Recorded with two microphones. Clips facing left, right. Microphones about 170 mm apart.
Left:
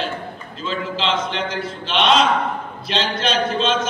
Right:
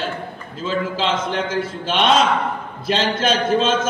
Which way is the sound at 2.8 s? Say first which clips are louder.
Right 3 dB; 45° right (ahead or behind).